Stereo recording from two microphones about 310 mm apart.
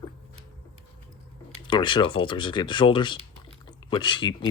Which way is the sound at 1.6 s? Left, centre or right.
Centre.